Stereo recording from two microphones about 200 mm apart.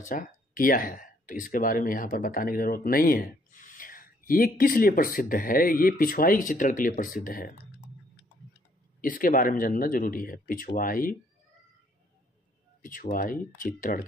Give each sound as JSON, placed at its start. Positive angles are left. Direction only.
{"t": 0.1, "sound": "speech", "side_deg": 45}
{"t": 9.0, "sound": "speech", "side_deg": 45}
{"t": 12.8, "sound": "speech", "side_deg": 40}